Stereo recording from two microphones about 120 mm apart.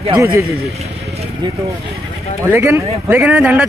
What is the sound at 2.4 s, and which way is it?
Speech, 20° right (ahead or behind).